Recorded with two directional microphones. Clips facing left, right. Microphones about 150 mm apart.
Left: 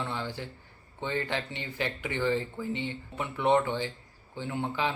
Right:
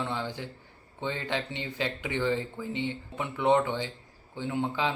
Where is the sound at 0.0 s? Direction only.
15° right (ahead or behind).